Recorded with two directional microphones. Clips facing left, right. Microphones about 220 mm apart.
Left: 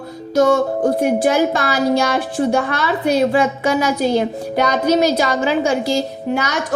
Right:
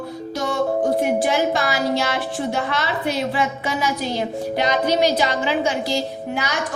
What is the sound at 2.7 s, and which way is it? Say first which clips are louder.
A woman's voice: left 6 dB; 50° left (ahead or behind).